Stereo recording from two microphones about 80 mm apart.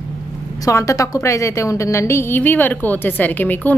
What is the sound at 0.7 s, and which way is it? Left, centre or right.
A woman's voice, left.